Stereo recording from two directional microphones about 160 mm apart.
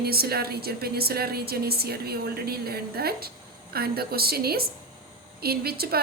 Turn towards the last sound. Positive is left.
turn(degrees=-75)  # may be behind; listen again after turning